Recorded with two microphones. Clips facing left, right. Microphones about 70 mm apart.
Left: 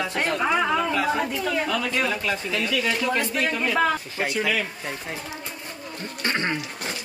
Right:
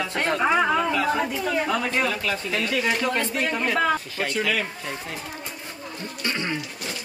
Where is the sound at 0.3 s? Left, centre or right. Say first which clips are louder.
Right 3 dB; centre.